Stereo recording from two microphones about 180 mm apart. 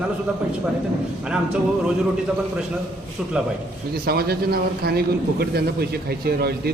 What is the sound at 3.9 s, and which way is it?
A man's voice, 60° right (ahead or behind).